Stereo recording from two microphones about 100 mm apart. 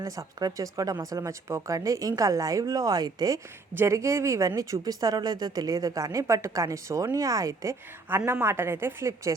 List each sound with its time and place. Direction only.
0.0 s a woman's voice: 35° right (ahead or behind)